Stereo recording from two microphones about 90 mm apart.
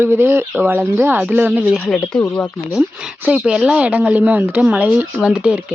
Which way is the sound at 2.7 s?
5° right (ahead or behind).